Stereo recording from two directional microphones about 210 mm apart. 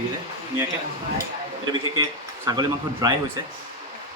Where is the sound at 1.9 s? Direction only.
20° right (ahead or behind).